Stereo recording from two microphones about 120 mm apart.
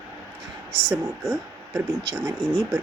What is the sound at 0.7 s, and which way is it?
Speech, 25° right (ahead or behind).